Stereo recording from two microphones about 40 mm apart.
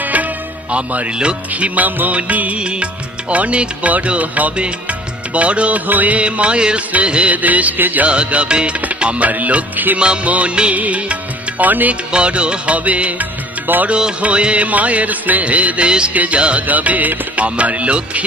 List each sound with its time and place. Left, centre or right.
0.0 s music: right
0.7 s music: right
2.6 s music: right
7.4 s music: right
8.0 s music: right
12.1 s music: right
13.7 s music: right
14.2 s music: right
15.9 s music: right
16.1 s music: right
16.4 s music: right
16.6 s music: right